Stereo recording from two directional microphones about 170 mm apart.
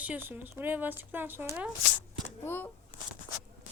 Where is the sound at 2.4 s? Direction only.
10° left (ahead or behind).